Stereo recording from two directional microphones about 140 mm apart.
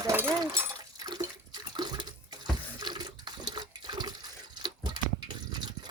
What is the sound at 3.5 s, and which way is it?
Toilet flush, 30° right (ahead or behind).